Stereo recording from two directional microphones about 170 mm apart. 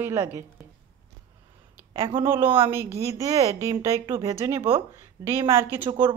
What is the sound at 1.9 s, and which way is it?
Speech, 30° right (ahead or behind).